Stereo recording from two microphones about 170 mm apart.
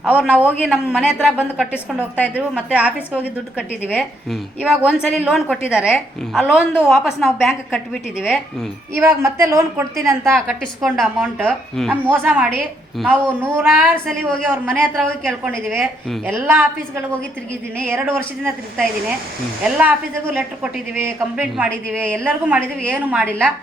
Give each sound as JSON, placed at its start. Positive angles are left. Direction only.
{"t": 0.0, "sound": "a man's voice", "side_deg": -5}
{"t": 1.7, "sound": "a woman's voice", "side_deg": 10}
{"t": 2.3, "sound": "a woman's voice", "side_deg": -5}
{"t": 9.0, "sound": "a woman's voice", "side_deg": -15}
{"t": 10.3, "sound": "a woman's voice", "side_deg": 0}
{"t": 12.0, "sound": "a woman's voice", "side_deg": -10}
{"t": 14.1, "sound": "a woman's voice", "side_deg": 0}
{"t": 14.5, "sound": "a woman's voice", "side_deg": -10}
{"t": 14.8, "sound": "a woman's voice", "side_deg": 5}
{"t": 16.2, "sound": "a woman's voice", "side_deg": -10}
{"t": 17.7, "sound": "a woman's voice", "side_deg": -10}